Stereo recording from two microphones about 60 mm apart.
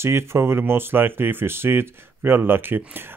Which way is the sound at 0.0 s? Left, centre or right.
Right.